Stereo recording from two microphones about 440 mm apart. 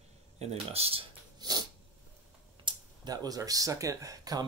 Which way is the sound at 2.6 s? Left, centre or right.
Centre.